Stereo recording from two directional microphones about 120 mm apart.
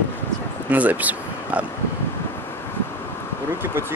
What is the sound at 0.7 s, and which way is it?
Speech, 15° right (ahead or behind).